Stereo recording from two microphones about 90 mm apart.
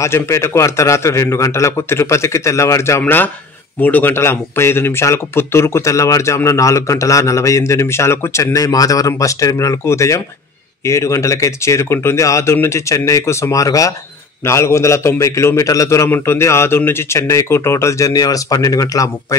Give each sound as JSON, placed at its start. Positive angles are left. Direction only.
{"t": 0.0, "sound": "speech", "side_deg": 30}
{"t": 3.8, "sound": "speech", "side_deg": 20}